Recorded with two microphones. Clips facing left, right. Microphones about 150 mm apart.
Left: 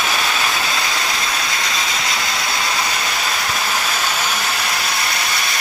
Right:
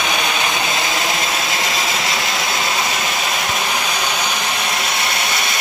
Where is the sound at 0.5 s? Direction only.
20° right (ahead or behind).